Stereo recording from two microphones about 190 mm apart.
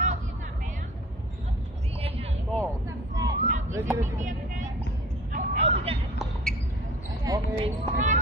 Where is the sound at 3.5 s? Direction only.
40° right (ahead or behind).